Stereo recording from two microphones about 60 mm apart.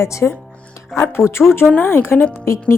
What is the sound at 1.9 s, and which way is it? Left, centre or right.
Speech, left.